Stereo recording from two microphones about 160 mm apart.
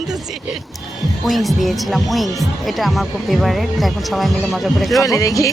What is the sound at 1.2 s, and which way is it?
Speech, centre (ahead or behind).